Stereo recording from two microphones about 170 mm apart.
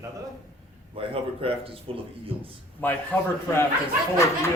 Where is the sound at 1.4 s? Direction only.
35° right (ahead or behind).